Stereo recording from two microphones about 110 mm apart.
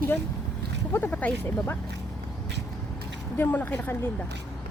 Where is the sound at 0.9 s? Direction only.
15° left (ahead or behind).